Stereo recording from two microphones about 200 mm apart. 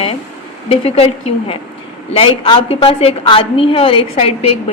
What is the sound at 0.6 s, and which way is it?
Speech, 30° left (ahead or behind).